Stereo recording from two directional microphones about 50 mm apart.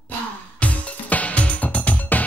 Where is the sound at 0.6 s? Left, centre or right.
Left.